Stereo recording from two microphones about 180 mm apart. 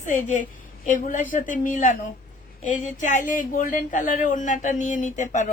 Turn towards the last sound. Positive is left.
turn(degrees=45)  # may be behind; listen again after turning